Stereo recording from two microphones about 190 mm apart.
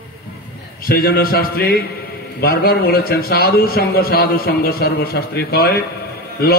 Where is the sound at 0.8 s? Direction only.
50° left (ahead or behind).